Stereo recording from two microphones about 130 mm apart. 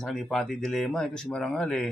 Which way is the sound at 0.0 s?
5° left (ahead or behind).